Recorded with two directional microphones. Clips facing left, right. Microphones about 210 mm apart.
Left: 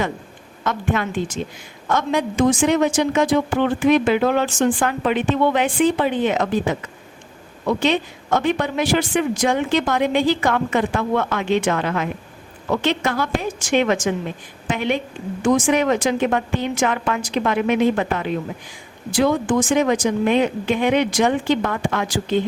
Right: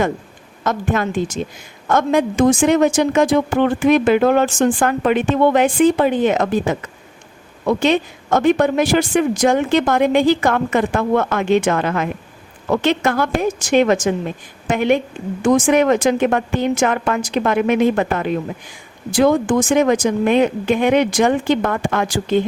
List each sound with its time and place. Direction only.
0.6 s a woman's voice: 40° right (ahead or behind)